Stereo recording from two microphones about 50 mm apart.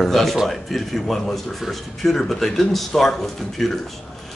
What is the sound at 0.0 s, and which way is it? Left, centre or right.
A man's voice, centre.